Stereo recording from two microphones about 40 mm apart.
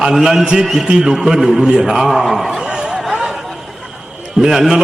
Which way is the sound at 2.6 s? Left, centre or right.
Right.